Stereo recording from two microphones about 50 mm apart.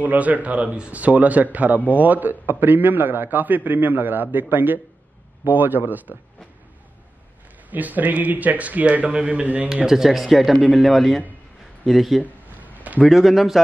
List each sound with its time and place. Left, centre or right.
0.0 s a man's voice: right
7.7 s a man's voice: right
9.8 s speech: centre